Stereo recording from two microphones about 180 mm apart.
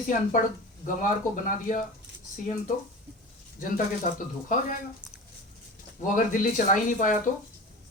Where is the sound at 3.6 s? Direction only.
50° left (ahead or behind).